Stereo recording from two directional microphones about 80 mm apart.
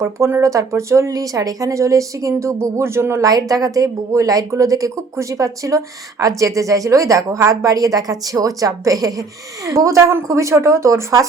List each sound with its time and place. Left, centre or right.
0.0 s speech: right
3.2 s a woman's voice: right